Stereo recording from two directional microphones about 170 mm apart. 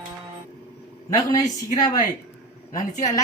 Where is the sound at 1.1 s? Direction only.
20° left (ahead or behind).